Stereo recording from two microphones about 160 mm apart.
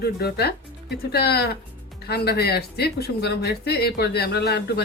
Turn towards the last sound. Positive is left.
turn(degrees=85)